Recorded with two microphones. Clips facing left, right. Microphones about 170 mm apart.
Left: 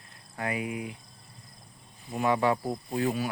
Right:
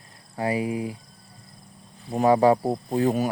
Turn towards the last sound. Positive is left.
turn(degrees=-40)  # may be behind; listen again after turning